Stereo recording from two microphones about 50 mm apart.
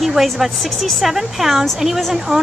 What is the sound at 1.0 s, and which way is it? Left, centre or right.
A woman's voice, centre.